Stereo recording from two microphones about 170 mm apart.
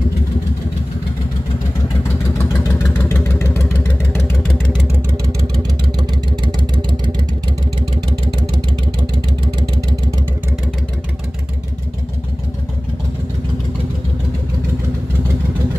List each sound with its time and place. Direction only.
2.3 s vehicle: 15° left (ahead or behind)
9.0 s vehicle: 25° right (ahead or behind)